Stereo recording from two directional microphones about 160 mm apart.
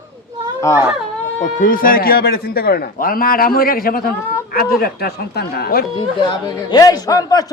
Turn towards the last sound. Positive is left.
turn(degrees=20)  # may be behind; listen again after turning